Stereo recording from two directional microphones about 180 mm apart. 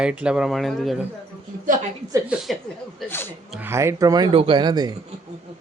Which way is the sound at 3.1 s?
10° left (ahead or behind).